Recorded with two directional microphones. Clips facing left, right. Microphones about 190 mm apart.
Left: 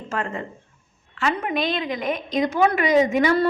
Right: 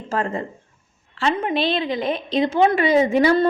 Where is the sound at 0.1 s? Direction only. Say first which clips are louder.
Right 4 dB; 35° right (ahead or behind).